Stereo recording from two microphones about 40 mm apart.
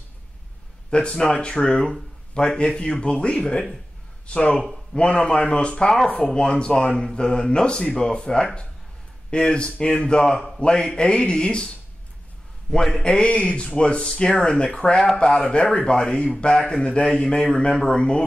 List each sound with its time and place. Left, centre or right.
0.8 s speech: left
10.2 s a man's voice: centre
10.6 s speech: left
12.8 s a man's voice: left